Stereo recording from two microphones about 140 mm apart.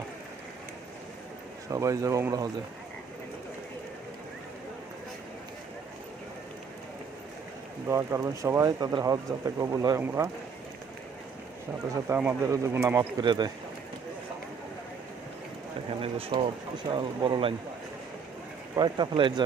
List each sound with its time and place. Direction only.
1.7 s speech: 25° right (ahead or behind)
7.9 s speech: 20° right (ahead or behind)
12.0 s speech: 15° right (ahead or behind)
13.2 s speech: 35° right (ahead or behind)
16.0 s speech: 45° right (ahead or behind)
18.8 s speech: 35° right (ahead or behind)